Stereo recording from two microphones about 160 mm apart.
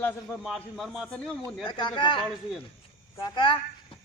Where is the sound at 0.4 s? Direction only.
Centre (ahead or behind).